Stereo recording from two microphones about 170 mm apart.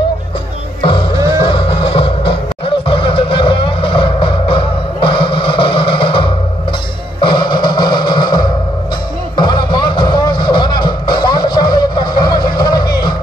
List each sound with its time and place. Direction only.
1.1 s music: 20° right (ahead or behind)
1.4 s music: 30° left (ahead or behind)